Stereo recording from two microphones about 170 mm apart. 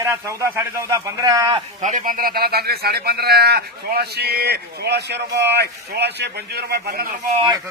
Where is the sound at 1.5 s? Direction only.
45° right (ahead or behind); by 7.1 s 65° right (ahead or behind).